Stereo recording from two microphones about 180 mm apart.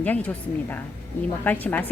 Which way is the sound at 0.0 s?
10° left (ahead or behind).